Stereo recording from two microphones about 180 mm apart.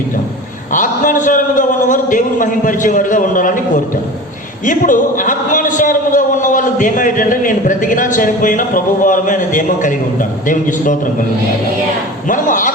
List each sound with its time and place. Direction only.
0.7 s a man's voice: 45° left (ahead or behind)
4.6 s a man's voice: 45° left (ahead or behind)
12.3 s a man's voice: 45° left (ahead or behind)